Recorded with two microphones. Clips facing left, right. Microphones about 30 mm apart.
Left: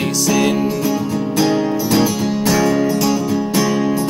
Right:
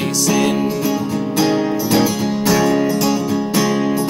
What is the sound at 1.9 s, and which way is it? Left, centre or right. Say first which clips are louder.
Music: even; centre.